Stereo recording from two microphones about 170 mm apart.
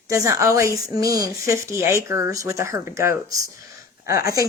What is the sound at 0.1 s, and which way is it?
A woman's voice, 20° right (ahead or behind).